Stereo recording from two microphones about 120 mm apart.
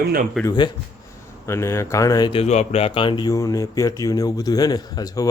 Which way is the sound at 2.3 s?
65° left (ahead or behind).